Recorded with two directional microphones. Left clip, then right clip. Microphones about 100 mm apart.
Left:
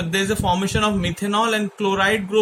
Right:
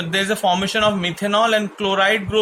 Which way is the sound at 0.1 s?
35° left (ahead or behind).